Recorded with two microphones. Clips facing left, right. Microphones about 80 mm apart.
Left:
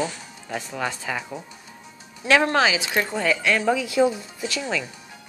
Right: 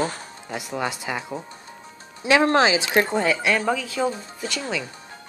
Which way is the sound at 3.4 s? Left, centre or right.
Centre.